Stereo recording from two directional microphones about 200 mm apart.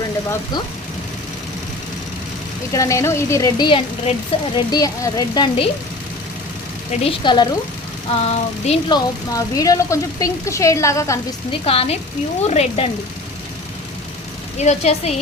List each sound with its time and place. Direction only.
2.7 s a woman's voice: 15° left (ahead or behind)
7.0 s a woman's voice: 25° left (ahead or behind)
11.6 s a woman's voice: 30° left (ahead or behind)
14.6 s a woman's voice: 35° left (ahead or behind)